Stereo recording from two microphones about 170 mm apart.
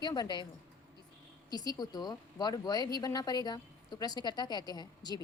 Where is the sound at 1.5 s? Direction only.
25° left (ahead or behind).